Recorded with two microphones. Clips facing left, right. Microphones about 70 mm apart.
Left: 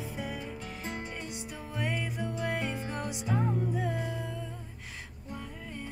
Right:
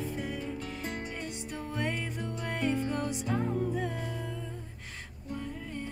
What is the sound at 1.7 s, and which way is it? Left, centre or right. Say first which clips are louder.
Music: left 1 dB; centre.